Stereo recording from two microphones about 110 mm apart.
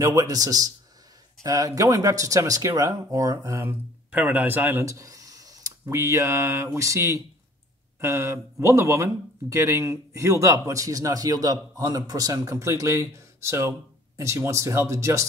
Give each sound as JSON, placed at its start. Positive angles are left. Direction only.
{"t": 0.0, "sound": "speech", "side_deg": -30}
{"t": 4.1, "sound": "speech", "side_deg": -15}